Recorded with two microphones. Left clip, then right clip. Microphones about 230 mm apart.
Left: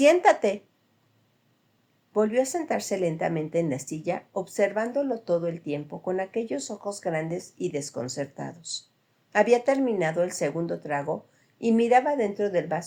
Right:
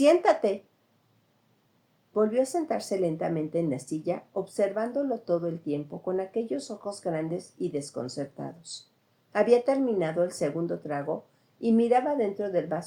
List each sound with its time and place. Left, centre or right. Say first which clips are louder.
0.0 s speech: left 2 dB; left
2.1 s speech: left 1 dB; left